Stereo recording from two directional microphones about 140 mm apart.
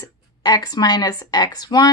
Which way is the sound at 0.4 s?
30° left (ahead or behind).